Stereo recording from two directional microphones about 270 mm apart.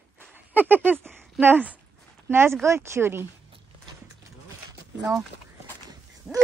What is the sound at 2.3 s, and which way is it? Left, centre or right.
Speech, centre.